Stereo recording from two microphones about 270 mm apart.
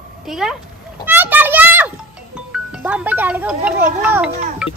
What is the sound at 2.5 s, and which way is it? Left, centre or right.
A child's voice, centre.